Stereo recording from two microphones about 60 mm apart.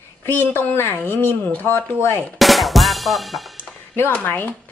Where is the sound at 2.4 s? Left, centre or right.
Centre.